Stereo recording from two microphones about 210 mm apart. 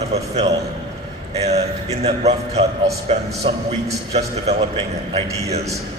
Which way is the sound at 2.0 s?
30° right (ahead or behind).